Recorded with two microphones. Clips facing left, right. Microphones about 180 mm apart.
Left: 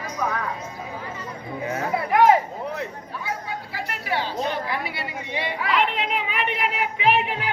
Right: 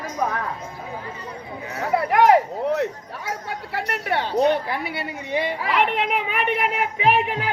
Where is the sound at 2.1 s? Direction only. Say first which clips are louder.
Right 1 dB; 75° right (ahead or behind).